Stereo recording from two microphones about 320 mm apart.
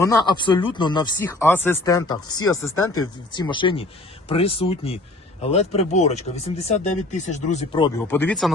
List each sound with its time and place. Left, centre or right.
0.0 s speech: centre
2.2 s speech: left
2.5 s speech: centre
2.7 s speech: left
3.3 s speech: centre